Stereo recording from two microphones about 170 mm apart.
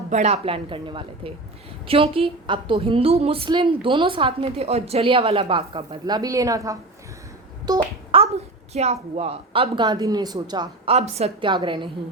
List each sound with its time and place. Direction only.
0.1 s a woman's voice: 40° right (ahead or behind); by 6.7 s 20° right (ahead or behind)
7.7 s a child's voice: 30° right (ahead or behind)
10.9 s a woman's voice: 40° right (ahead or behind)